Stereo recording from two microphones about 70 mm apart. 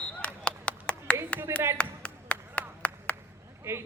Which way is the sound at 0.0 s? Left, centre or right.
Centre.